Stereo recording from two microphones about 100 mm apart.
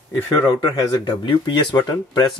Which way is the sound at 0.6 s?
45° left (ahead or behind).